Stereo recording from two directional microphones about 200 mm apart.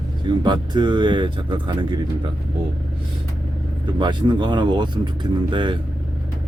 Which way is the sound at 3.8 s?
20° right (ahead or behind).